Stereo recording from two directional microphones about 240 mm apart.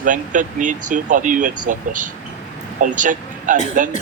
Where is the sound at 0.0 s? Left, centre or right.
Right.